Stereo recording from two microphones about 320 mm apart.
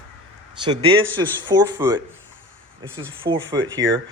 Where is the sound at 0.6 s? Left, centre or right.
Centre.